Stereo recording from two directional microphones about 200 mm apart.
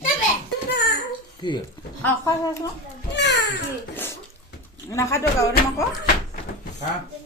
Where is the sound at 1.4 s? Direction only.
20° left (ahead or behind).